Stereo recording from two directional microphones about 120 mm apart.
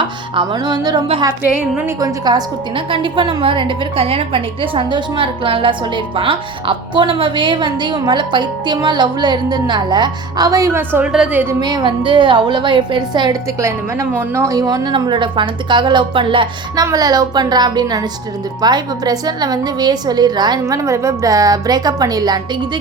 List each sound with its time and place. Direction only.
0.0 s speech: 40° right (ahead or behind)
1.5 s a woman's voice: 10° right (ahead or behind)
2.0 s a woman's voice: 35° right (ahead or behind)
11.0 s a woman's voice: 5° right (ahead or behind)
11.3 s a woman's voice: 15° right (ahead or behind)
11.6 s a woman's voice: 40° right (ahead or behind)
14.2 s a woman's voice: 25° right (ahead or behind); by 16.8 s 45° right (ahead or behind)
16.8 s a woman's voice: 30° right (ahead or behind)